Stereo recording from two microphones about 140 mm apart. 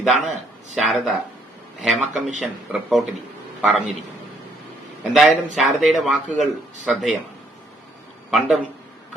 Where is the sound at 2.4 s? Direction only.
5° right (ahead or behind).